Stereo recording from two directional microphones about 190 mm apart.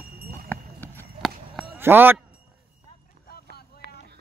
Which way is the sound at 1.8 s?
10° right (ahead or behind).